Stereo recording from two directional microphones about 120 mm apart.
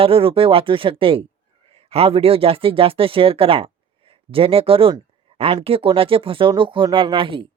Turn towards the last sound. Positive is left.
turn(degrees=-45)  # may be behind; listen again after turning